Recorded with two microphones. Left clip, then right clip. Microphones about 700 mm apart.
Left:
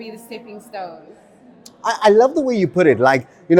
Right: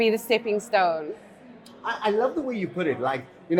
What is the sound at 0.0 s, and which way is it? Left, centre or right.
Speech, right.